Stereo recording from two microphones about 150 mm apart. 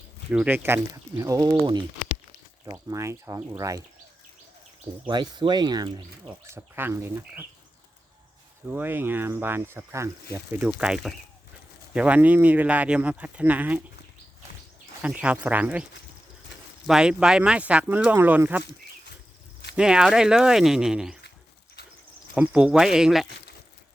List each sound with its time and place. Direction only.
0.3 s speech: 10° right (ahead or behind)
5.0 s speech: 30° right (ahead or behind)
6.2 s speech: 15° right (ahead or behind)
8.7 s speech: 15° right (ahead or behind)
15.0 s speech: 10° right (ahead or behind)
19.7 s speech: 5° right (ahead or behind)
22.4 s speech: 5° right (ahead or behind)